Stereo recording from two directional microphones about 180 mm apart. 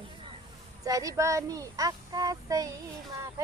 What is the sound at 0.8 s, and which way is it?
Speech, 20° right (ahead or behind).